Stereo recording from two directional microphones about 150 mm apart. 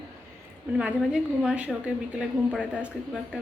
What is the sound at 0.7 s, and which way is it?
A woman's voice, 5° right (ahead or behind).